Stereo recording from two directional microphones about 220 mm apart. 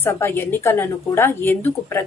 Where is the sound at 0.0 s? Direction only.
10° left (ahead or behind).